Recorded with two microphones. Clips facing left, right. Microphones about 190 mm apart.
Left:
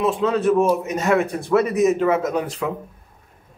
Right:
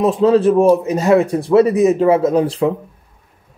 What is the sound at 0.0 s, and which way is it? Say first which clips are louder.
A man's voice: right 7 dB; 35° right (ahead or behind).